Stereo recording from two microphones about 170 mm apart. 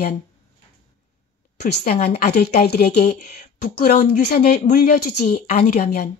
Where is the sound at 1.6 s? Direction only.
45° left (ahead or behind).